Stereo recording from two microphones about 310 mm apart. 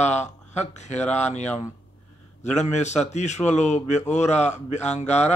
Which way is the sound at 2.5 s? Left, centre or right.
Left.